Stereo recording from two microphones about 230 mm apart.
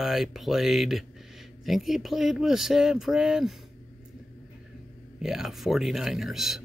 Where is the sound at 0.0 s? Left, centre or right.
Centre.